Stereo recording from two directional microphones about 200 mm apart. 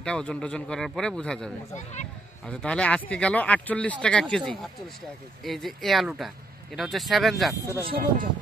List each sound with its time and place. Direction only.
0.0 s speech: 5° left (ahead or behind)
7.9 s speech: 45° right (ahead or behind)